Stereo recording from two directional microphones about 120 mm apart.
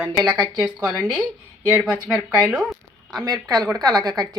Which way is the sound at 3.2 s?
30° right (ahead or behind).